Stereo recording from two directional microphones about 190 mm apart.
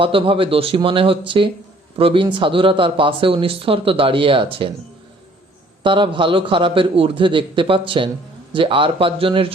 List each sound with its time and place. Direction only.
0.0 s speech: 30° right (ahead or behind)
5.8 s speech: 25° right (ahead or behind)